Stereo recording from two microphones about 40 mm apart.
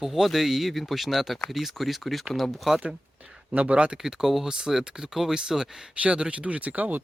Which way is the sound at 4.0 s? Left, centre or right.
Centre.